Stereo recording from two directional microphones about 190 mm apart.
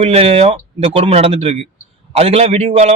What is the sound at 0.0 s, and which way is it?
A man's voice, 30° right (ahead or behind).